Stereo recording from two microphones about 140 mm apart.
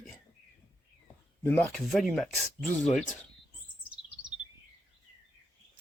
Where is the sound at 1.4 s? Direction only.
15° left (ahead or behind).